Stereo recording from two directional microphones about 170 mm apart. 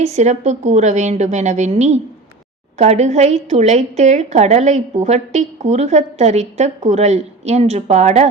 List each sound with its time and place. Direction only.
0.0 s a woman's voice: 40° right (ahead or behind)